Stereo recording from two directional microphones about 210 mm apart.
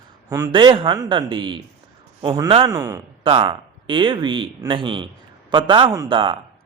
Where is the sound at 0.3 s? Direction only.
15° right (ahead or behind).